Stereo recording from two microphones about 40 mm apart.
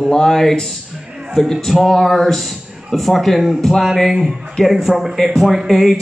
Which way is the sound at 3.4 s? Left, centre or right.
Centre.